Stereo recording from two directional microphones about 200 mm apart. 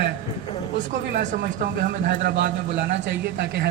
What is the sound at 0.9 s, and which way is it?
A man's voice, 45° right (ahead or behind).